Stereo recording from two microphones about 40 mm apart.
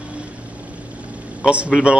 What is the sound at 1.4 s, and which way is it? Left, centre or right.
Speech, right.